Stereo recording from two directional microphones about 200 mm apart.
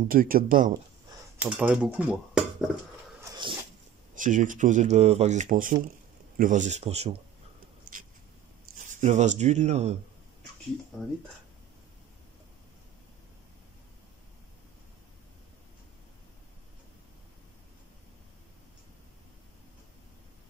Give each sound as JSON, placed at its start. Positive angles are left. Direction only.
{"t": 0.1, "sound": "speech", "side_deg": -45}
{"t": 1.4, "sound": "speech", "side_deg": -5}
{"t": 3.2, "sound": "cat", "side_deg": -20}
{"t": 4.1, "sound": "speech", "side_deg": -40}
{"t": 7.9, "sound": "a sound", "side_deg": -45}
{"t": 8.7, "sound": "speech", "side_deg": -35}